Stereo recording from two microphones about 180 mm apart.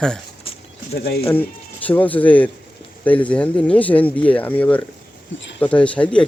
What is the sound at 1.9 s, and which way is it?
Speech, 10° left (ahead or behind).